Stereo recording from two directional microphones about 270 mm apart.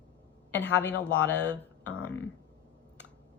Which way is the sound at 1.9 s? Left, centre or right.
Centre.